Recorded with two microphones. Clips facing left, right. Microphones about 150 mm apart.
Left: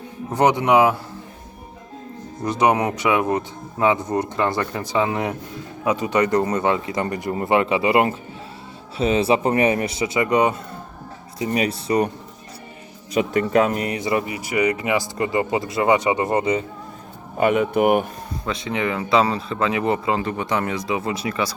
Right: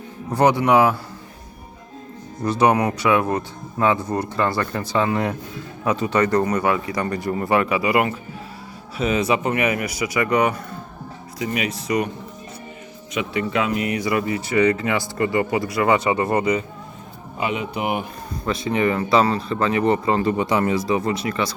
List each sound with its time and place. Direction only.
0.3 s speech: 20° left (ahead or behind)
2.4 s speech: 15° left (ahead or behind)
11.3 s speech: 35° left (ahead or behind)
13.1 s speech: 45° left (ahead or behind)
13.9 s speech: 25° left (ahead or behind)
17.3 s speech: 50° left (ahead or behind)
18.4 s speech: 5° right (ahead or behind)
20.2 s speech: 10° right (ahead or behind); by 21.5 s 10° left (ahead or behind)